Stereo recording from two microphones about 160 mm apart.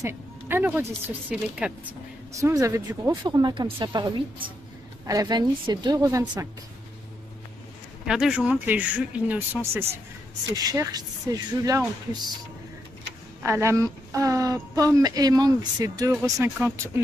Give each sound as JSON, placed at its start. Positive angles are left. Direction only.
{"t": 0.0, "sound": "a woman's voice", "side_deg": -10}
{"t": 2.3, "sound": "speech", "side_deg": -20}
{"t": 8.1, "sound": "speech", "side_deg": -5}
{"t": 13.4, "sound": "speech", "side_deg": -15}